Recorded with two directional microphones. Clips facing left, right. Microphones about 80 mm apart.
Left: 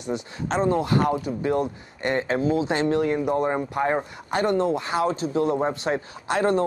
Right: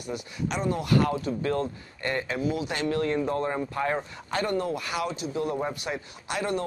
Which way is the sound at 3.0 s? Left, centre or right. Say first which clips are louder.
Left 4 dB; centre.